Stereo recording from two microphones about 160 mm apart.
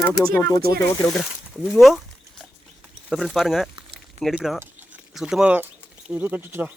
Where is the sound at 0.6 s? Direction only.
75° right (ahead or behind).